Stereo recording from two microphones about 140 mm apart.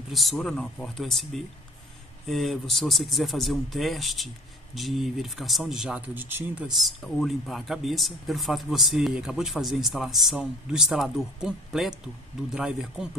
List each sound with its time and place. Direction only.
0.1 s speech: centre (ahead or behind); by 6.4 s 15° right (ahead or behind)
6.8 s speech: centre (ahead or behind)